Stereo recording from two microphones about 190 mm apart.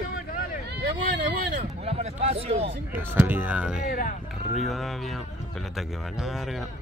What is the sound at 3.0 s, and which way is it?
Speech, 10° right (ahead or behind).